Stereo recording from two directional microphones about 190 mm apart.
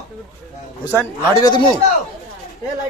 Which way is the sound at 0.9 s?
10° right (ahead or behind).